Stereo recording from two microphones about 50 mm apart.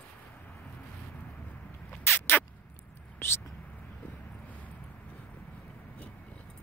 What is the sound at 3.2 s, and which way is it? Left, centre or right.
Speech, left.